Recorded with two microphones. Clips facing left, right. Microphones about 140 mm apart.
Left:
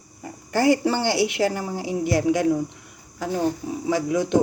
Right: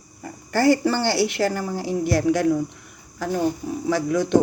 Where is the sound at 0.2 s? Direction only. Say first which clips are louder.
Right 1 dB; 20° left (ahead or behind).